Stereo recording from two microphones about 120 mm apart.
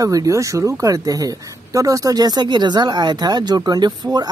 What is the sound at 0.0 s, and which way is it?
Speech, 30° right (ahead or behind).